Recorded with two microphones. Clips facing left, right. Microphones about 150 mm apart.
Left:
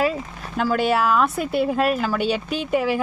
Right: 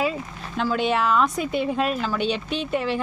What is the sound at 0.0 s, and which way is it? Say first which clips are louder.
Speech: left 3 dB; 5° left (ahead or behind).